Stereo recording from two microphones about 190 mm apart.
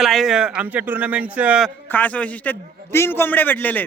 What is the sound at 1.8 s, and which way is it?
A man's voice, 10° left (ahead or behind).